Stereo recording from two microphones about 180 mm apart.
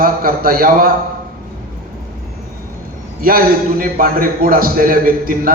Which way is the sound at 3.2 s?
55° right (ahead or behind).